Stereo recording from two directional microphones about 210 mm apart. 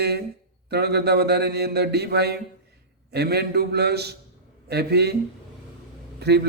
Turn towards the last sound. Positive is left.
turn(degrees=-50)  # may be behind; listen again after turning